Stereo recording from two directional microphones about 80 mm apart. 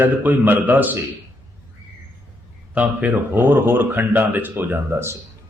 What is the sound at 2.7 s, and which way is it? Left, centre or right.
Speech, centre.